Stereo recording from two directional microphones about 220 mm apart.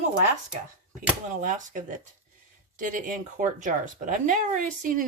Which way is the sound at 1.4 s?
35° right (ahead or behind).